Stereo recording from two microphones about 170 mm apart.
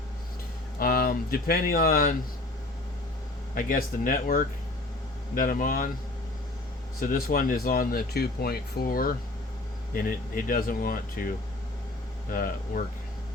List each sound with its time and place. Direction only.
0.8 s speech: 55° left (ahead or behind)
3.5 s speech: 55° left (ahead or behind)
7.0 s speech: 55° left (ahead or behind)
12.3 s speech: 55° left (ahead or behind)